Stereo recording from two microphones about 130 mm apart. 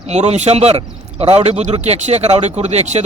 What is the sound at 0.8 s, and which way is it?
A man's voice, 45° right (ahead or behind).